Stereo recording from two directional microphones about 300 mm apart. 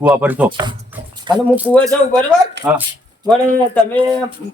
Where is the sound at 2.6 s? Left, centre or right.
Right.